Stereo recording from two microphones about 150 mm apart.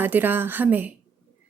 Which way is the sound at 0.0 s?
15° right (ahead or behind).